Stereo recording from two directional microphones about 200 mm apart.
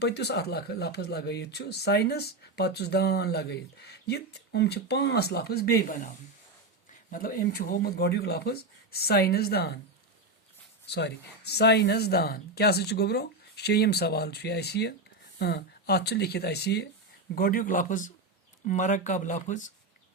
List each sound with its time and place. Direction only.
0.0 s speech: 55° left (ahead or behind)
7.1 s speech: 45° left (ahead or behind)
10.9 s speech: 55° left (ahead or behind); by 19.7 s 40° left (ahead or behind)